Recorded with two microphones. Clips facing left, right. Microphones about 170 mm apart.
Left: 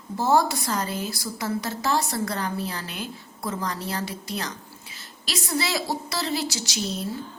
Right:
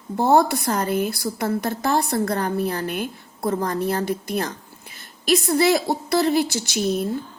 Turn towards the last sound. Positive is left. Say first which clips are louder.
# right 7 dB
turn(degrees=-55)  # may be behind; listen again after turning